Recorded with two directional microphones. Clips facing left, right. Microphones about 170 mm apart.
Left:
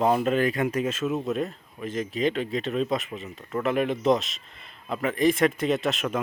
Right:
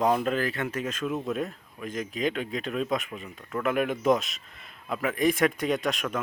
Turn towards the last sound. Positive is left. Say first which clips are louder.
# left 2 dB
turn(degrees=5)  # may be behind; listen again after turning